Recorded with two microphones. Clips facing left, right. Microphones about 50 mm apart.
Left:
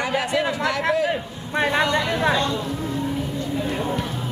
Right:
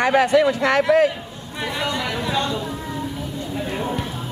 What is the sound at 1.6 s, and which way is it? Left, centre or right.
Speech, left.